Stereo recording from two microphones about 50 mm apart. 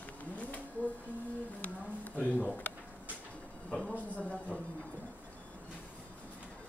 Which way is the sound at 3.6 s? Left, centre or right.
Centre.